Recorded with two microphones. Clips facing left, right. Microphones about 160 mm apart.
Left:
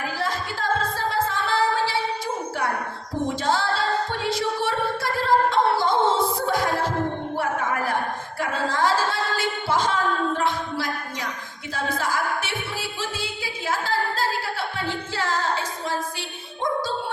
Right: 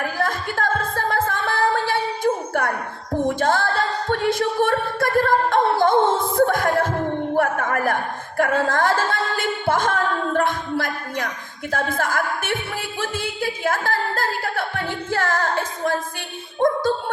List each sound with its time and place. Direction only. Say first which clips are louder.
0.0 s music: right 3 dB; 55° right (ahead or behind)
3.2 s a capella: right 3 dB; 55° right (ahead or behind)
7.3 s a sound: right 5 dB; 55° right (ahead or behind)
11.7 s music: right 3 dB; 50° right (ahead or behind)